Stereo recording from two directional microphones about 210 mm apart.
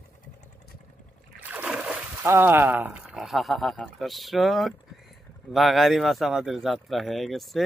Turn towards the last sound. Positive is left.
turn(degrees=0)  # may be behind; listen again after turning